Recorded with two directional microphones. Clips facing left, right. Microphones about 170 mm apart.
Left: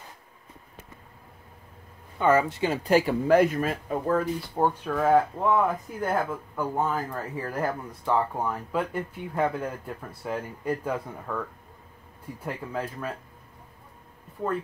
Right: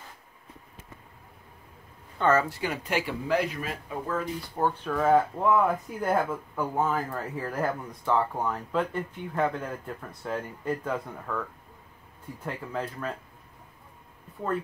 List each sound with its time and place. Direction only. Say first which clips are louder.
2.1 s speech: left 2 dB; 10° left (ahead or behind)
2.5 s speech: left 7 dB; 25° left (ahead or behind); by 4.2 s 45° left (ahead or behind)
4.6 s speech: left 2 dB; 15° left (ahead or behind)
4.9 s speech: even; centre (ahead or behind)
12.4 s speech: left 1 dB; 5° left (ahead or behind)